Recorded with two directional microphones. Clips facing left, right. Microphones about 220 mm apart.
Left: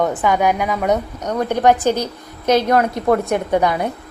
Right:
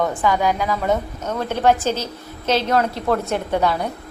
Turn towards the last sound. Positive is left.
turn(degrees=15)  # may be behind; listen again after turning